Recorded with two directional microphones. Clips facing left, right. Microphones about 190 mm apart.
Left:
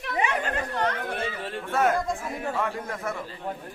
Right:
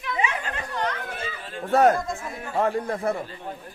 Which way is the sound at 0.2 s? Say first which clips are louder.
Left 4 dB; 55° left (ahead or behind).